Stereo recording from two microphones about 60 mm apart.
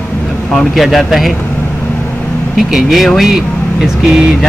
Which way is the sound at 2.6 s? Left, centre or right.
Centre.